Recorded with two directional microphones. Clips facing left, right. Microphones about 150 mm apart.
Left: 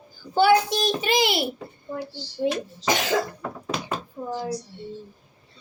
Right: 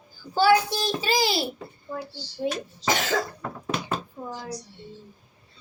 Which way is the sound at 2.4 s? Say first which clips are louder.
Left 3 dB; 15° left (ahead or behind).